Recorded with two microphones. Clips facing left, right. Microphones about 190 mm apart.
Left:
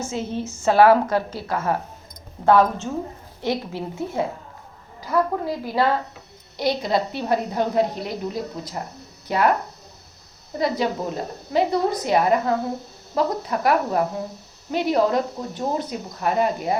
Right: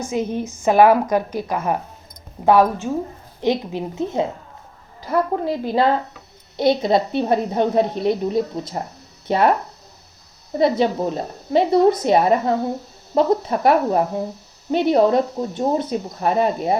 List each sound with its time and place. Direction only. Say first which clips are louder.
0.0 s a woman's voice: right 4 dB; 15° right (ahead or behind)
5.5 s a woman's voice: right 3 dB; 25° right (ahead or behind)
10.6 s a woman's voice: right 5 dB; 25° right (ahead or behind)